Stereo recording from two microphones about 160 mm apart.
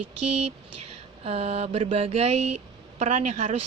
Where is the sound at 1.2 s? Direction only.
40° right (ahead or behind).